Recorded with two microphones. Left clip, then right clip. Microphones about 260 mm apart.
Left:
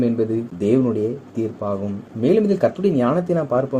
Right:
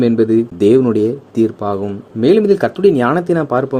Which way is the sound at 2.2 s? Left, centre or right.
Right.